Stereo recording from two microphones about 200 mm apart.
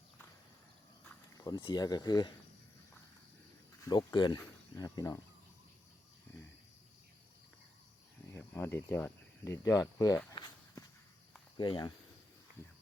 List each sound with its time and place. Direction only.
1.4 s speech: 20° left (ahead or behind)
3.8 s speech: 20° left (ahead or behind)
8.3 s cricket: 10° left (ahead or behind)
11.5 s speech: 25° left (ahead or behind)